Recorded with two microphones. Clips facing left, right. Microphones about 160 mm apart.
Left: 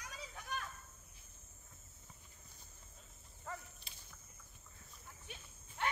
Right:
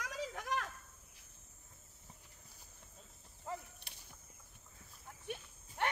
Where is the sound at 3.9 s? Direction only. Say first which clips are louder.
Right 1 dB; 65° right (ahead or behind).